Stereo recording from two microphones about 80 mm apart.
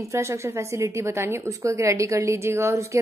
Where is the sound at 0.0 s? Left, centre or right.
Right.